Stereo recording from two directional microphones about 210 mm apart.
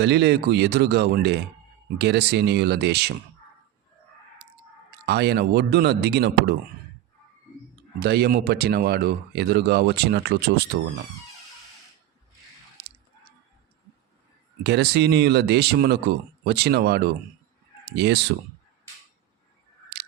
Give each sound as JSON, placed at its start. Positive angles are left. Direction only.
{"t": 0.0, "sound": "speech", "side_deg": -50}
{"t": 5.0, "sound": "speech", "side_deg": -55}
{"t": 7.9, "sound": "speech", "side_deg": -50}
{"t": 12.8, "sound": "a sound", "side_deg": -50}
{"t": 14.6, "sound": "speech", "side_deg": -50}